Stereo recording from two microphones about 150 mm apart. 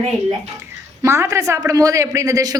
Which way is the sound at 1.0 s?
20° right (ahead or behind).